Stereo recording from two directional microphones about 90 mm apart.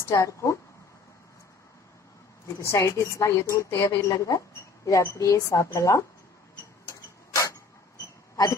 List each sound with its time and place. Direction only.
0.1 s speech: 35° left (ahead or behind)
2.6 s speech: 30° left (ahead or behind)
8.0 s a sound: 40° left (ahead or behind)